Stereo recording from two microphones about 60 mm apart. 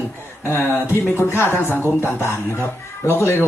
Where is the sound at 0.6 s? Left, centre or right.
Left.